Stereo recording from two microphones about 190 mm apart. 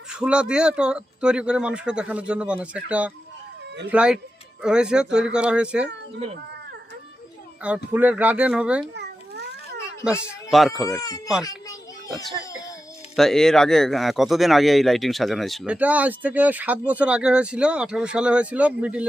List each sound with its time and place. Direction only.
0.1 s speech: 5° right (ahead or behind)
7.9 s speech: 10° right (ahead or behind)
9.0 s a sound: 60° right (ahead or behind)
10.0 s speech: 5° right (ahead or behind)
11.4 s children playing: 20° left (ahead or behind)
13.1 s speech: centre (ahead or behind)